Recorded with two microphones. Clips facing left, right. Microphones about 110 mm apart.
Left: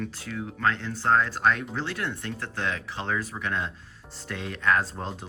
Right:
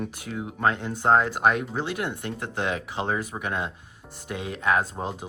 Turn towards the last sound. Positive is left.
turn(degrees=-15)  # may be behind; listen again after turning